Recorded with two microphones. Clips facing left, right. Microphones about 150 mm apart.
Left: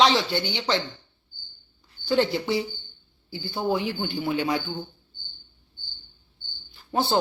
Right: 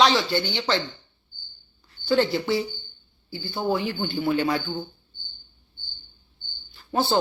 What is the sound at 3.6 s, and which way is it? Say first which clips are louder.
Speech: right 1 dB; 15° left (ahead or behind).